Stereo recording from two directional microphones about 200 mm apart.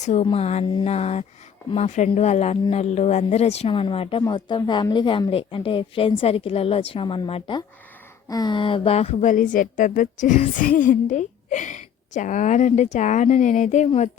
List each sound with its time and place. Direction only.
0.0 s a woman's voice: 30° left (ahead or behind)